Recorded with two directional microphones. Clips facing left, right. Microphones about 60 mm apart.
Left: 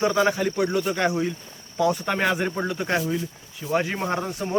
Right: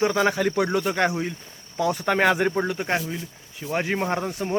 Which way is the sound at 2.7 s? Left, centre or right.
Right.